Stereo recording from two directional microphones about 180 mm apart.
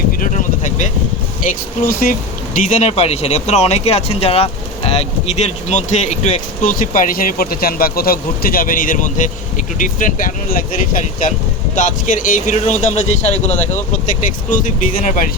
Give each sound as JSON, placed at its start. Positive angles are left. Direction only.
{"t": 0.2, "sound": "vehicle", "side_deg": 45}
{"t": 1.9, "sound": "speech", "side_deg": 55}
{"t": 2.6, "sound": "speech", "side_deg": 40}
{"t": 6.6, "sound": "speech", "side_deg": 50}